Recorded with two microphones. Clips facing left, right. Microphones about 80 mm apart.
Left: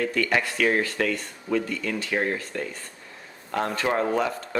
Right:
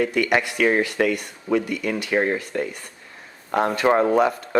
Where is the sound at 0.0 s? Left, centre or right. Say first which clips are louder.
Right 4 dB; centre.